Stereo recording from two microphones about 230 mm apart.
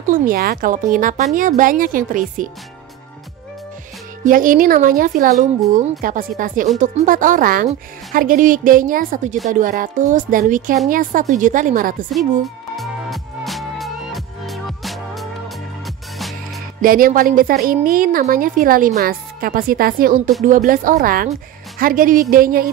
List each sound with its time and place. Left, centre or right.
0.1 s speech: right
4.2 s speech: right
12.7 s music: centre
16.8 s speech: right